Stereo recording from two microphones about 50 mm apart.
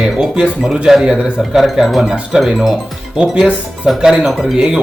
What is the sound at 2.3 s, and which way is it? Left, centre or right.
Speech, centre.